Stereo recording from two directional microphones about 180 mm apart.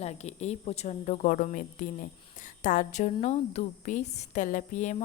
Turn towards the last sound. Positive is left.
turn(degrees=45)  # may be behind; listen again after turning